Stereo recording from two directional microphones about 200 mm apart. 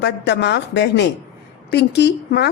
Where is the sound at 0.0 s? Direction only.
60° left (ahead or behind).